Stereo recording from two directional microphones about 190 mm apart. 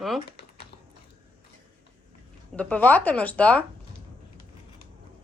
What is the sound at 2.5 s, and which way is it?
Speech, 10° left (ahead or behind).